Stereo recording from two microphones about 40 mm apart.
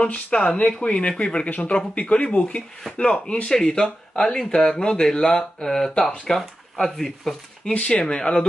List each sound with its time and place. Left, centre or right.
0.0 s speech: left
3.0 s speech: left; by 7.3 s centre
7.7 s speech: left